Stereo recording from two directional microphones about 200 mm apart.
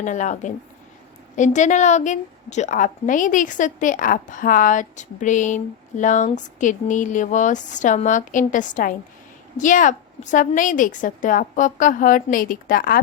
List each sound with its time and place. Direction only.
0.0 s a woman's voice: 40° left (ahead or behind)